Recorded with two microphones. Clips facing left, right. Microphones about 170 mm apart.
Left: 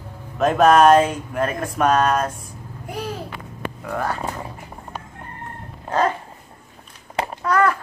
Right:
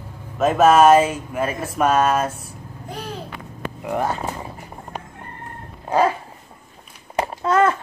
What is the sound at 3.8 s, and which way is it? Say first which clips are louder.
Speech: right 3 dB; 20° right (ahead or behind).